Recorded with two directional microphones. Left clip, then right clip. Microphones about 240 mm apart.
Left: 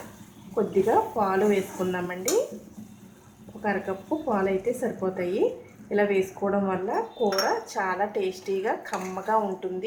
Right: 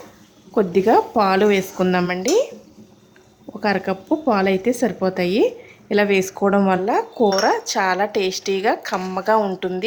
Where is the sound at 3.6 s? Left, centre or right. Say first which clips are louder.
Right 8 dB; right.